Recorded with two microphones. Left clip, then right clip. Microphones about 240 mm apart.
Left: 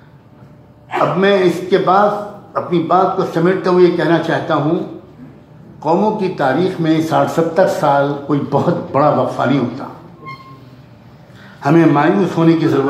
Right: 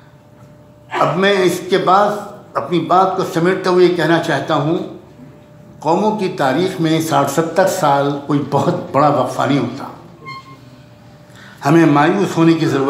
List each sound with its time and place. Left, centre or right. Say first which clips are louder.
0.9 s speech: left 1 dB; right
5.8 s speech: left 1 dB; right
11.6 s speech: even; right